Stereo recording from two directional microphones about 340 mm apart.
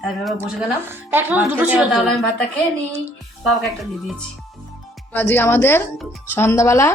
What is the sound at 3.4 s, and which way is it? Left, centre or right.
Speech, centre.